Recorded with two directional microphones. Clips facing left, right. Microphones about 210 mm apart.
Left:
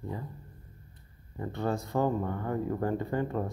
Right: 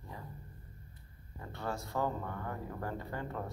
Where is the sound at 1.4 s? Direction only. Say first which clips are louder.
Left 8 dB; 20° left (ahead or behind).